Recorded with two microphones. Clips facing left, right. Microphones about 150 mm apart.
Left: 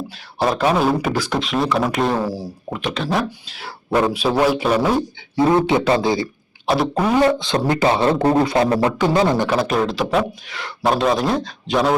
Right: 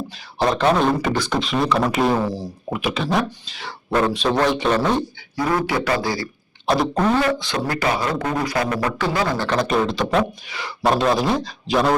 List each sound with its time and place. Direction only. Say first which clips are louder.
0.3 s speech: even; 5° left (ahead or behind)
2.6 s speech: right 1 dB; 5° right (ahead or behind)
5.4 s speech: left 6 dB; 25° left (ahead or behind)
6.7 s a sound: left 1 dB; 5° left (ahead or behind)
7.2 s speech: left 4 dB; 25° left (ahead or behind)
9.5 s speech: left 1 dB; 5° left (ahead or behind)